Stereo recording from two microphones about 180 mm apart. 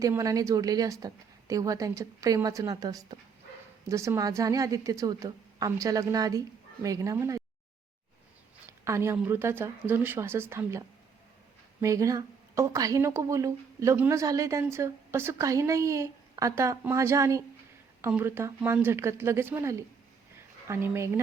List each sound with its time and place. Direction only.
0.0 s a woman's voice: 20° right (ahead or behind)
8.8 s speech: 15° right (ahead or behind)